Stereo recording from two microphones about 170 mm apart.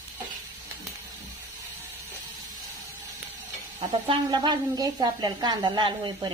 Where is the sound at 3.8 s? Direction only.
30° right (ahead or behind).